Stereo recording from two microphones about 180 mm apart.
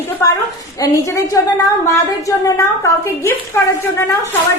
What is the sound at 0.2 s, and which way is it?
Speech, 15° left (ahead or behind).